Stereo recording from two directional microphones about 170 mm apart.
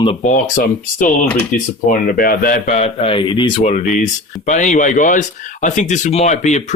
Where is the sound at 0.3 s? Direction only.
50° left (ahead or behind).